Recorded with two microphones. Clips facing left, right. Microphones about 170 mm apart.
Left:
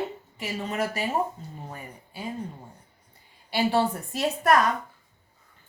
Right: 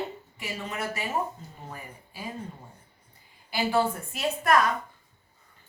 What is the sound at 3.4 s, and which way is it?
Speech, 30° left (ahead or behind).